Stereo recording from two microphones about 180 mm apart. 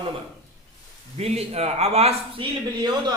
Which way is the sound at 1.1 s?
35° right (ahead or behind).